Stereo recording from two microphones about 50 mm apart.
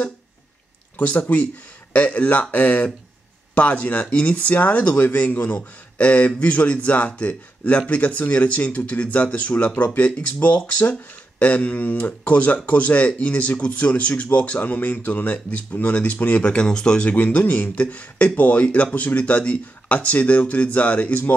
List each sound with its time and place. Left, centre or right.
0.9 s speech: left